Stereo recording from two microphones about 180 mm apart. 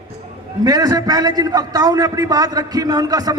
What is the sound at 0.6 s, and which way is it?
A man's voice, 20° right (ahead or behind).